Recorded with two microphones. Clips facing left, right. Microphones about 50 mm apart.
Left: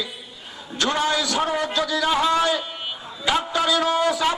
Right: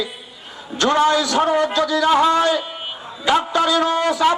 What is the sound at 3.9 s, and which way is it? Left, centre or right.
Speech, right.